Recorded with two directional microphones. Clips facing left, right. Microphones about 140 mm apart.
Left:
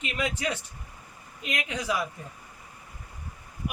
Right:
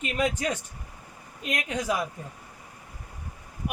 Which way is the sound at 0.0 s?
45° right (ahead or behind).